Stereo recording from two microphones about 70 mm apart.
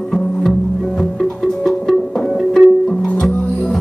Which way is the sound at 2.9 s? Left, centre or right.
Left.